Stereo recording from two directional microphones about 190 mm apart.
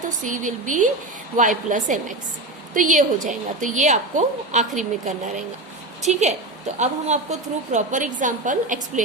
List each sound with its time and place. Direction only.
0.0 s a woman's voice: 40° right (ahead or behind)